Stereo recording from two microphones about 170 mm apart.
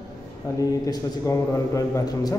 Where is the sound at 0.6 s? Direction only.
20° left (ahead or behind).